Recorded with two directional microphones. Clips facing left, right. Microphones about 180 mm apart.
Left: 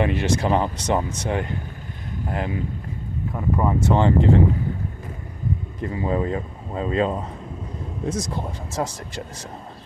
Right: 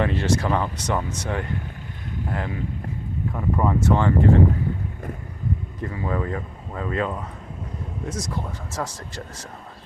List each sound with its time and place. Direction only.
0.0 s speech: 15° left (ahead or behind)
5.8 s speech: 20° left (ahead or behind)